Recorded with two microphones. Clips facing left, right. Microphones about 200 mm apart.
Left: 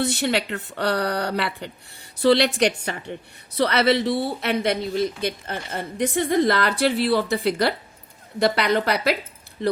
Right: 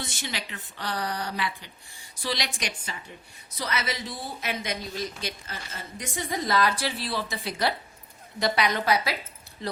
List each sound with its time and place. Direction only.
0.0 s speech: 65° left (ahead or behind)